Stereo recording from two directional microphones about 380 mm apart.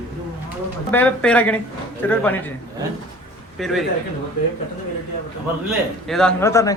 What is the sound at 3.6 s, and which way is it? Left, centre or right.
Speech, centre.